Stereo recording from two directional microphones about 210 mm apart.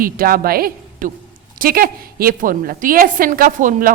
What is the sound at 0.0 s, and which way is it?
A woman's voice, 45° right (ahead or behind).